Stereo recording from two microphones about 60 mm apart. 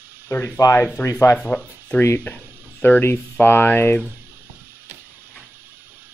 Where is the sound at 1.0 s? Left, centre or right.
Left.